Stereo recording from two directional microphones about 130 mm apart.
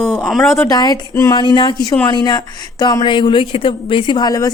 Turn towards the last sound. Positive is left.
turn(degrees=30)  # may be behind; listen again after turning